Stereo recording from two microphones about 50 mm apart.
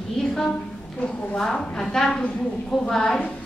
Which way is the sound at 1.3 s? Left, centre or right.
Centre.